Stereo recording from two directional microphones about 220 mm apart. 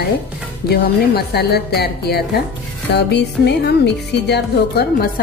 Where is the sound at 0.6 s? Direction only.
45° left (ahead or behind).